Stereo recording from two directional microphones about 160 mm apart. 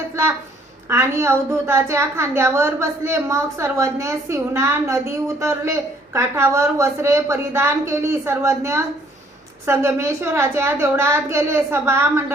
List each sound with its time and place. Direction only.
0.9 s a woman's voice: 15° right (ahead or behind)